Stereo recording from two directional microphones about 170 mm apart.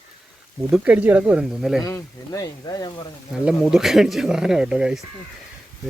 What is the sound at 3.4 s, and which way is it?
Speech, 5° right (ahead or behind).